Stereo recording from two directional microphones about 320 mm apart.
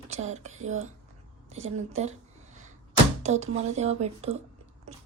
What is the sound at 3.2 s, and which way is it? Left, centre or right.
A woman's voice, right.